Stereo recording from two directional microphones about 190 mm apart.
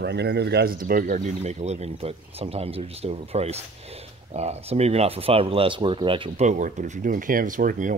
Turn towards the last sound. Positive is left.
turn(degrees=-45)  # may be behind; listen again after turning